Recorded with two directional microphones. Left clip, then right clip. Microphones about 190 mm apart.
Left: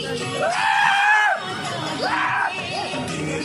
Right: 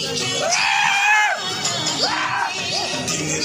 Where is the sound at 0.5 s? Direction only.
15° left (ahead or behind).